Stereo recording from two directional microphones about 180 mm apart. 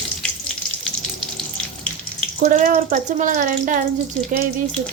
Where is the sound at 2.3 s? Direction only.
40° right (ahead or behind).